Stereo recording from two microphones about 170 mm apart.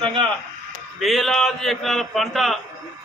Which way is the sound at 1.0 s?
Centre (ahead or behind).